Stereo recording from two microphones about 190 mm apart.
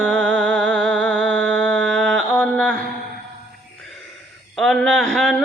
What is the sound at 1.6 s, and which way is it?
Mantra, 5° left (ahead or behind).